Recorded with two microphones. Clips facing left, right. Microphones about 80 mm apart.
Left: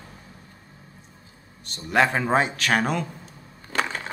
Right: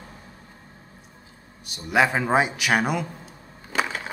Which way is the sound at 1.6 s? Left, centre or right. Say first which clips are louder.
Even; centre.